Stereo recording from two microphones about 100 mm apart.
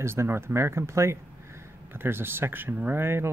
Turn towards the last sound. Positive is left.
turn(degrees=-25)  # may be behind; listen again after turning